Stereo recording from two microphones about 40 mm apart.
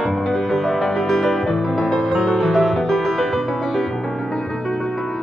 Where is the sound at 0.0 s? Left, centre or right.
Centre.